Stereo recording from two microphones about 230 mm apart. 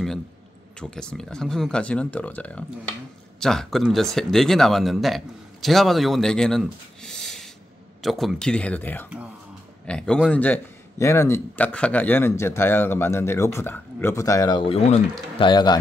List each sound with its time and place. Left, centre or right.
0.7 s a man's voice: centre